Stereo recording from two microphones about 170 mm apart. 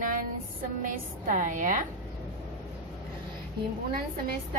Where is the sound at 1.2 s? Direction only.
50° right (ahead or behind).